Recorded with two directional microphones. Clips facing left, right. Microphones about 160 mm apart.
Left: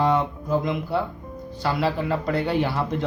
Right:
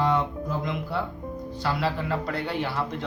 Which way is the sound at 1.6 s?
15° left (ahead or behind).